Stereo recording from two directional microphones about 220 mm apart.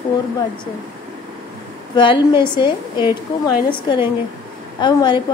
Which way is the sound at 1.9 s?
20° left (ahead or behind).